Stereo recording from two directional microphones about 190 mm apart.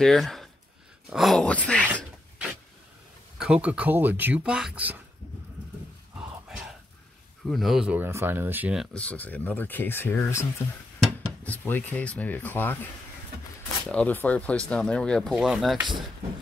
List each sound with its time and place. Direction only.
0.0 s speech: centre (ahead or behind)
3.3 s speech: 5° right (ahead or behind)
6.1 s a sound: 5° right (ahead or behind)
7.4 s speech: centre (ahead or behind)
8.9 s speech: 5° left (ahead or behind)
13.8 s speech: 10° left (ahead or behind)